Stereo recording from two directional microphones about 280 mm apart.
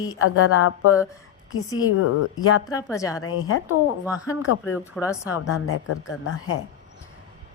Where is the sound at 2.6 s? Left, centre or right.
Centre.